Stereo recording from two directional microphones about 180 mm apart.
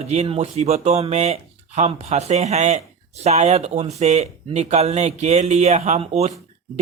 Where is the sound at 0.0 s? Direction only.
35° right (ahead or behind).